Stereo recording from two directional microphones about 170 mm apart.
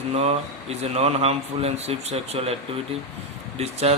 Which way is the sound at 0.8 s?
35° right (ahead or behind).